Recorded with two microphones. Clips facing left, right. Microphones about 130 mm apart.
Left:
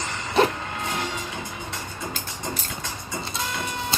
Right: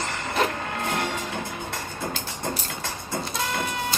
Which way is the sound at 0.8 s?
55° right (ahead or behind).